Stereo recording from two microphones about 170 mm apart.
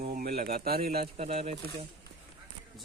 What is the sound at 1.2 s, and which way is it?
Speech, 40° right (ahead or behind).